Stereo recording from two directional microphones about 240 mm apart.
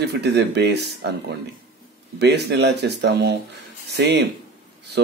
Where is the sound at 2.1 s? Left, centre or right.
Right.